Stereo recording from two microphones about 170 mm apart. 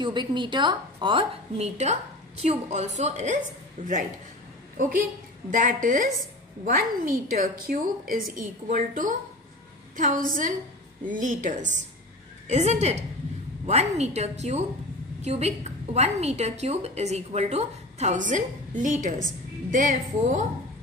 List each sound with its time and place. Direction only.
0.0 s a woman's voice: 25° right (ahead or behind)
1.6 s a woman's voice: 40° right (ahead or behind)